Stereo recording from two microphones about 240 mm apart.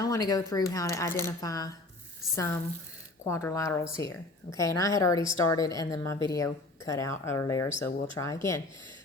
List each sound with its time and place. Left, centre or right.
0.0 s a woman's voice: centre
7.7 s speech: left
8.2 s a woman's voice: centre